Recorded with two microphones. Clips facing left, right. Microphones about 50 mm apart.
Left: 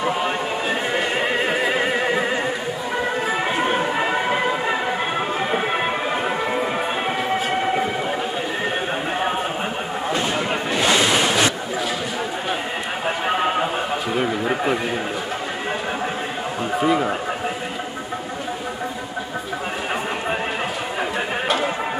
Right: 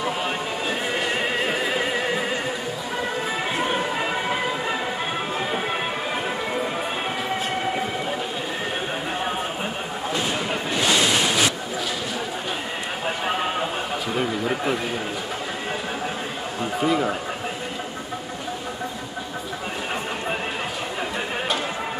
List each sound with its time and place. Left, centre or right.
0.0 s neigh: centre
3.3 s music: centre
10.8 s waves: centre
13.2 s a sound: centre
16.8 s speech: centre